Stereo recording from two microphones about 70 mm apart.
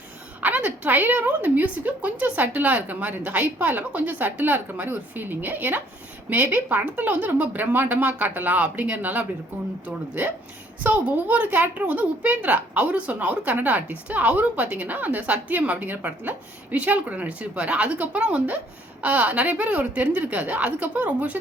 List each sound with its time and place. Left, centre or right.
0.4 s a woman's voice: right